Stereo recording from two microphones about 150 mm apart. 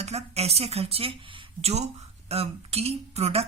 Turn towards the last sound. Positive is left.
turn(degrees=-45)  # may be behind; listen again after turning